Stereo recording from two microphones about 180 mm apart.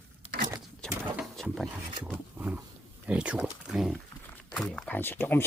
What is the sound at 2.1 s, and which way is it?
Roaring cats, 10° right (ahead or behind).